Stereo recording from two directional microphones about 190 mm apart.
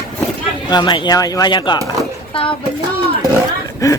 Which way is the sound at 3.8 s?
15° left (ahead or behind).